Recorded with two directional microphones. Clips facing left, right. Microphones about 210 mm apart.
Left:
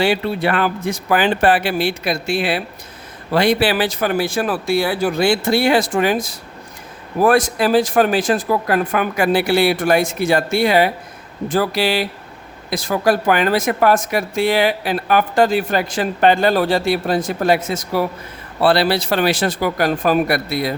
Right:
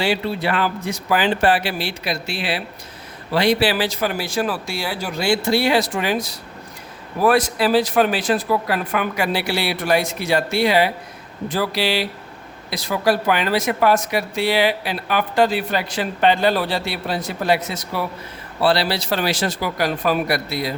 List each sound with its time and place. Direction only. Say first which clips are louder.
0.0 s speech: left 4 dB; 55° left (ahead or behind)